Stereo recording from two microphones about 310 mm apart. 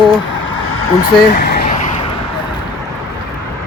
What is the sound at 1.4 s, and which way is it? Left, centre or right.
Vehicle, left.